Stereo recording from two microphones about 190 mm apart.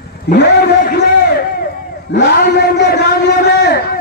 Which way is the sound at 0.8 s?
55° left (ahead or behind).